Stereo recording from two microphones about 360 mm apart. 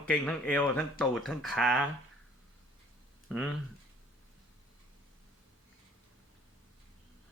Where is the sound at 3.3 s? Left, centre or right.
Centre.